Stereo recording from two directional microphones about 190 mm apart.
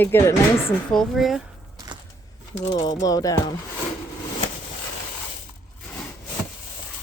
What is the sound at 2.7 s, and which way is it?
Speech, 20° left (ahead or behind).